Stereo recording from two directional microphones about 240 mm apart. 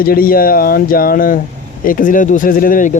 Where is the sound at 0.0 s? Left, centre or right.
Left.